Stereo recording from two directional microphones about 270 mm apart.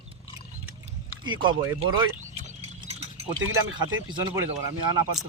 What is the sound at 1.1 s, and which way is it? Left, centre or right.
Speech, centre.